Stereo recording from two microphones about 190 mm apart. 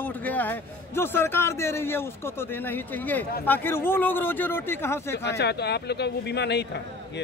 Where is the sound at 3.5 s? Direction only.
10° left (ahead or behind).